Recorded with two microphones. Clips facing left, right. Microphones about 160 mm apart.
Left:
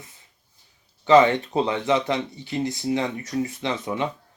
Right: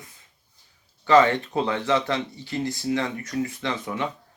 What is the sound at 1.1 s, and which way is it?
Speech, 20° left (ahead or behind).